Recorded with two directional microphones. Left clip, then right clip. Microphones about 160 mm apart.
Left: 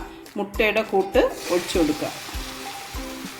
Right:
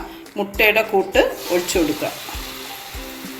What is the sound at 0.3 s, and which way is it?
Speech, 50° left (ahead or behind).